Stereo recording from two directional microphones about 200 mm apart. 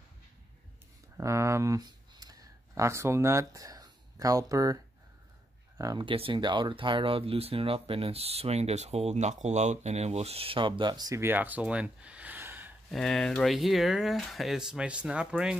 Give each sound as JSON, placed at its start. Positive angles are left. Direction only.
{"t": 1.1, "sound": "speech", "side_deg": -15}
{"t": 5.8, "sound": "speech", "side_deg": -20}
{"t": 12.9, "sound": "speech", "side_deg": 0}